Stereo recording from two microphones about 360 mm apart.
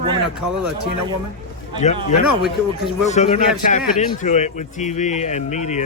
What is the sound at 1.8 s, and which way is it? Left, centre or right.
A man's voice, centre.